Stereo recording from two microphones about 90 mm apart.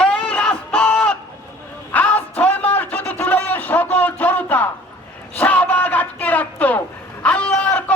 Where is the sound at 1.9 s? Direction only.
15° left (ahead or behind).